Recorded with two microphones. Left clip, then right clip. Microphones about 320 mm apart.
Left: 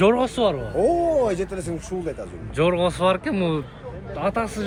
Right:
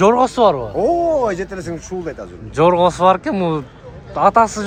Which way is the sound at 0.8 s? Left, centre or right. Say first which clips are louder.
Right 1 dB; right.